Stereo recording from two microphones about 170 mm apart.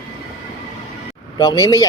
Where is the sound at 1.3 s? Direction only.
25° left (ahead or behind).